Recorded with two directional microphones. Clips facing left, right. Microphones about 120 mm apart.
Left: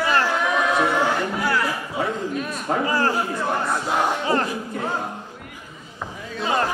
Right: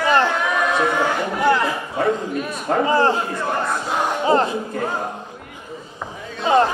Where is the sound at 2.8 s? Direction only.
25° right (ahead or behind).